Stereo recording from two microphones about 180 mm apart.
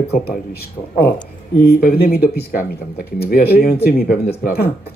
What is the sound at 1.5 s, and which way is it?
Speech, 60° left (ahead or behind).